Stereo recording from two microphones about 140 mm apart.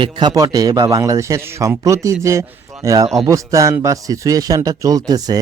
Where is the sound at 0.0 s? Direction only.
30° right (ahead or behind).